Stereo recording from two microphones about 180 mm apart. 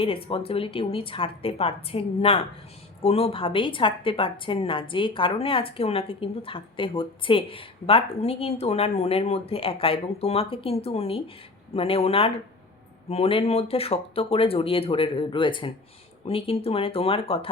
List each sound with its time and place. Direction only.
0.0 s a woman's voice: 30° left (ahead or behind)